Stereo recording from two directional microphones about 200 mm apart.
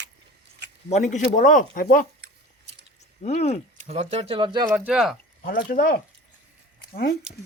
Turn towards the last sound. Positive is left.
turn(degrees=-5)  # may be behind; listen again after turning